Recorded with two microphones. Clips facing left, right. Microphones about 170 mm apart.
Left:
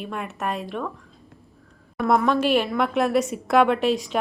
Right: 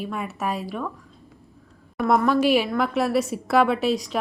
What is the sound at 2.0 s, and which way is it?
Speech, centre (ahead or behind).